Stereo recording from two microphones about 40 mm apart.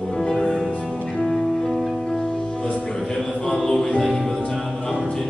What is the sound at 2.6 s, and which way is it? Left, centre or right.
Music, left.